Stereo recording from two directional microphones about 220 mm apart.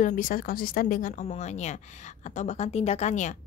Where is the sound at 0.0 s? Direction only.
35° left (ahead or behind).